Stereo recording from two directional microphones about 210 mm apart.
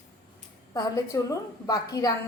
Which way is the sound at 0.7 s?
15° left (ahead or behind).